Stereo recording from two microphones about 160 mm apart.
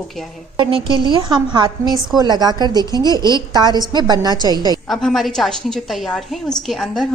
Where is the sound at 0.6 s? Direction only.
30° right (ahead or behind).